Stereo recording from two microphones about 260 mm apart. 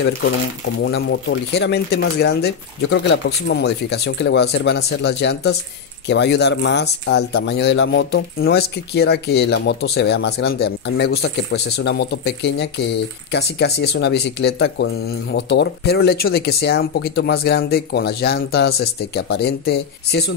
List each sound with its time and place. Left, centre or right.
0.8 s speech: left